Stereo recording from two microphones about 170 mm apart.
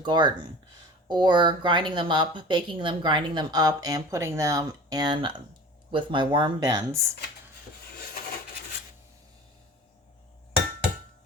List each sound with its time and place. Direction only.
0.0 s speech: 25° right (ahead or behind)